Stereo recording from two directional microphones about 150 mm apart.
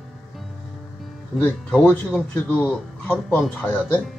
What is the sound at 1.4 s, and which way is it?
Speech, 5° left (ahead or behind).